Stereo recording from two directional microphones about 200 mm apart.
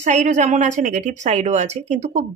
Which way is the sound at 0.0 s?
35° right (ahead or behind).